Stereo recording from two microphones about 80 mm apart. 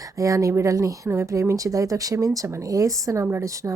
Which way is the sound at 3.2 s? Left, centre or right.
Right.